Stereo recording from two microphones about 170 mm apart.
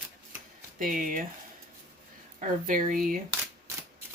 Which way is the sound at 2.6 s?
50° right (ahead or behind).